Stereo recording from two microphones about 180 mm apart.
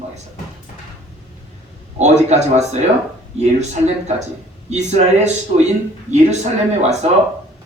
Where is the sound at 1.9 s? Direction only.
40° right (ahead or behind).